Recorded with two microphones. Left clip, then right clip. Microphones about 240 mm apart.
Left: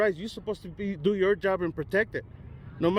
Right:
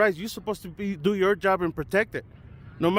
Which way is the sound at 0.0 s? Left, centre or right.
Right.